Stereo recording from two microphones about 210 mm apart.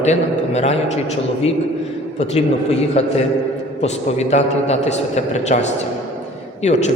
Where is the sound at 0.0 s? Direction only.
30° left (ahead or behind).